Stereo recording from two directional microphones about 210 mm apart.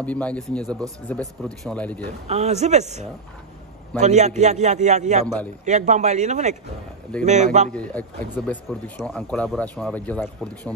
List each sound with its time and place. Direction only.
0.0 s speech: 5° left (ahead or behind)
2.2 s a man's voice: 30° right (ahead or behind)
7.7 s speech: 5° left (ahead or behind)